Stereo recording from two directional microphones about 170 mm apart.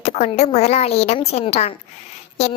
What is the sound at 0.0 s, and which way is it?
A child's voice, 40° left (ahead or behind).